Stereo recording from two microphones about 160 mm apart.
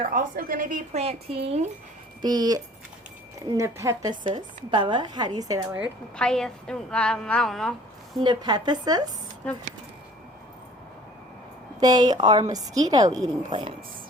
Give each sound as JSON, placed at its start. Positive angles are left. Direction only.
{"t": 0.1, "sound": "speech", "side_deg": -65}
{"t": 2.2, "sound": "speech", "side_deg": -25}
{"t": 4.4, "sound": "speech", "side_deg": -30}
{"t": 6.1, "sound": "a woman's voice", "side_deg": 5}
{"t": 8.2, "sound": "speech", "side_deg": -25}
{"t": 11.8, "sound": "speech", "side_deg": -25}